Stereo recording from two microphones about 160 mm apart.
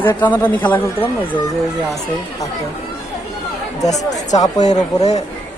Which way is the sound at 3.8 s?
20° left (ahead or behind).